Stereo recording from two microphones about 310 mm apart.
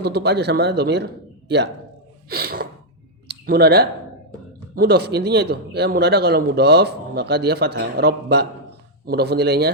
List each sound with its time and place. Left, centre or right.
0.0 s a man's voice: right
2.3 s gasp: right
3.2 s clicking: right
4.7 s a man's voice: right